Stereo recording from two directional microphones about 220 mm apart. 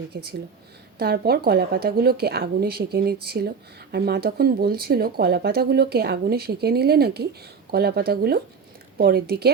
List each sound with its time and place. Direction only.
0.1 s speech: 45° right (ahead or behind)